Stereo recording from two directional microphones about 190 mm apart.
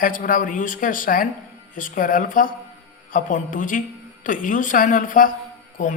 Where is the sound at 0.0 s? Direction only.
45° left (ahead or behind).